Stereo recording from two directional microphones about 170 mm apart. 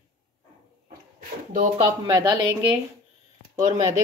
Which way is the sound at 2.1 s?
25° right (ahead or behind).